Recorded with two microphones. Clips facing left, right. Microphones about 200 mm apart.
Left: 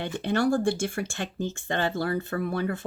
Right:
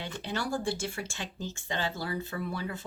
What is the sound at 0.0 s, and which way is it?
Speech, 55° left (ahead or behind).